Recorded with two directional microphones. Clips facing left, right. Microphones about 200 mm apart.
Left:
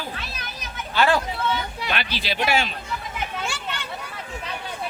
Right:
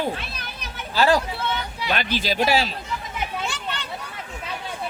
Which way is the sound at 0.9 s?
35° right (ahead or behind).